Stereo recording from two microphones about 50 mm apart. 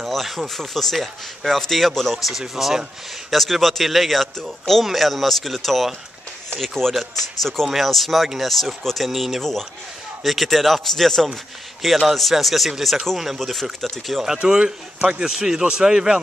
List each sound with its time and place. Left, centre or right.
0.0 s speech: centre
14.4 s speech: centre